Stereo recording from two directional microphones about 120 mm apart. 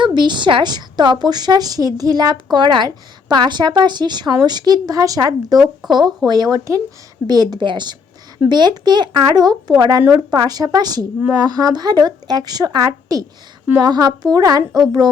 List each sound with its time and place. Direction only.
0.0 s a woman's voice: 40° right (ahead or behind)